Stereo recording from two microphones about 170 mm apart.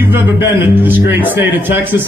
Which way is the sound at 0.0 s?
15° right (ahead or behind).